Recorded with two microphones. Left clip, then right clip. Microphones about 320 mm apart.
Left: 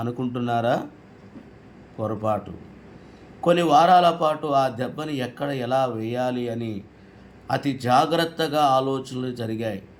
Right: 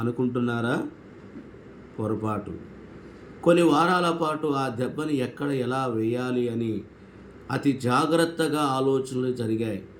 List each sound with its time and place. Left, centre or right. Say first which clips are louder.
0.0 s a man's voice: right 1 dB; centre
3.4 s a man's voice: left 3 dB; centre